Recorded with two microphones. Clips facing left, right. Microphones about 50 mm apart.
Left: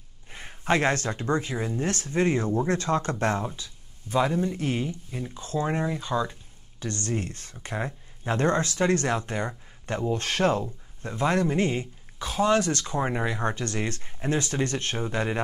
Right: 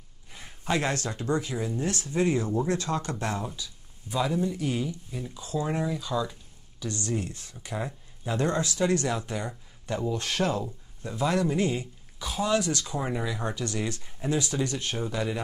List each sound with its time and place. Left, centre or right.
0.3 s speech: left
6.8 s speech: left